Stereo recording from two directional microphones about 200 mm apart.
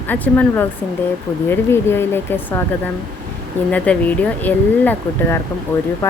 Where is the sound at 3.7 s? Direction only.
5° left (ahead or behind).